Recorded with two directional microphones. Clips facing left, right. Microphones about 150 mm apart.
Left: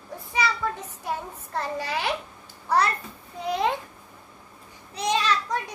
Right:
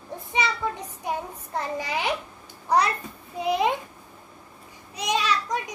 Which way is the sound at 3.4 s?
10° right (ahead or behind).